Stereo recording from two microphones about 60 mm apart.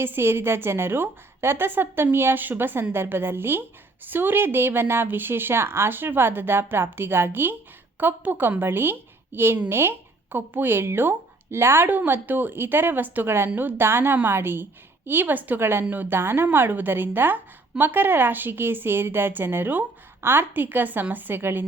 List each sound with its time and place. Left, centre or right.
0.0 s a woman's voice: right